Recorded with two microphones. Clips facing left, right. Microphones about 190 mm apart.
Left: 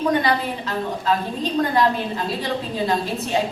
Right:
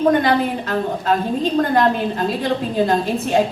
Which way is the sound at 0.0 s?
50° right (ahead or behind).